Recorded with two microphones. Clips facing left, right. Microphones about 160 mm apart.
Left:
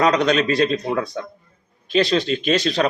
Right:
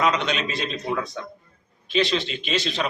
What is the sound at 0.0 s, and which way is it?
A man's voice, 40° left (ahead or behind).